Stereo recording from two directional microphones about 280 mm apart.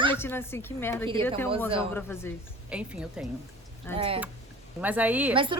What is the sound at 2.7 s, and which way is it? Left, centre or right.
Speech, centre.